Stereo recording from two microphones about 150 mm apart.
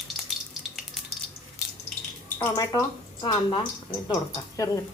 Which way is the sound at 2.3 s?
25° left (ahead or behind).